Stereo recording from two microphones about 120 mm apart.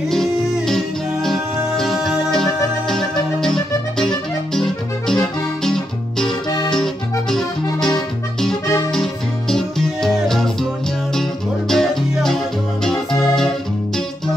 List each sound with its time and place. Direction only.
0.1 s music: 5° left (ahead or behind)
5.6 s guitar: 5° left (ahead or behind)
6.7 s accordion: 5° left (ahead or behind)
7.8 s music: 5° left (ahead or behind)
8.6 s music: 30° left (ahead or behind)
8.9 s music: 5° left (ahead or behind)
11.7 s music: 5° left (ahead or behind)